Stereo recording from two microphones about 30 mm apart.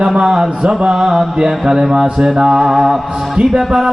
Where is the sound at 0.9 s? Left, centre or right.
Centre.